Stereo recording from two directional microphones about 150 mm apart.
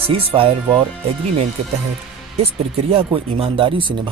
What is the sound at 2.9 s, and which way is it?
Speech, 35° right (ahead or behind).